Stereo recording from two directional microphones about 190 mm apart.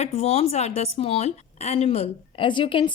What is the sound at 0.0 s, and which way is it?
Speech, 35° left (ahead or behind).